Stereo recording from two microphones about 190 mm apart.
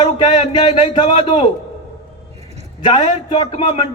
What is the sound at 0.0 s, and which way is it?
Speech, 25° left (ahead or behind).